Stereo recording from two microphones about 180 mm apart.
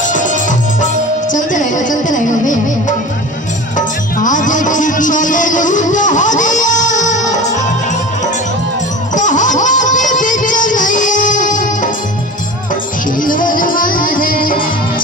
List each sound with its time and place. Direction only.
0.1 s music: 45° left (ahead or behind)
3.7 s music: 45° left (ahead or behind)
9.1 s music: 45° left (ahead or behind)
13.2 s music: 50° left (ahead or behind)